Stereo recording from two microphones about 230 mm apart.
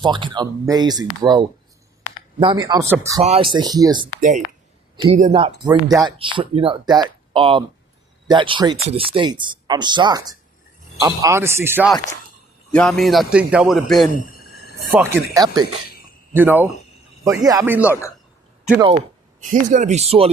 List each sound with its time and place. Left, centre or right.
0.0 s speech: centre
3.2 s speech: right
4.2 s speech: right; by 11.9 s centre
12.7 s a man's voice: centre
14.2 s a sound: left
15.1 s speech: centre
16.3 s speech: centre
17.8 s a man's voice: centre
19.4 s speech: right